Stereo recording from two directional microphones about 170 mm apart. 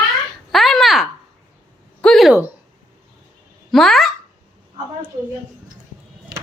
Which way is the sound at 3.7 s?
Centre (ahead or behind).